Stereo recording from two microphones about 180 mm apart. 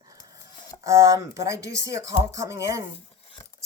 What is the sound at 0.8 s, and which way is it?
Speech, 15° right (ahead or behind).